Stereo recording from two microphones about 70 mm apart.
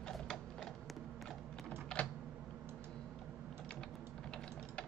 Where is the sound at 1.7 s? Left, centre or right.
Centre.